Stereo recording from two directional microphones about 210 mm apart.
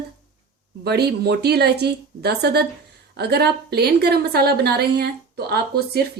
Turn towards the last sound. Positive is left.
turn(degrees=-50)  # may be behind; listen again after turning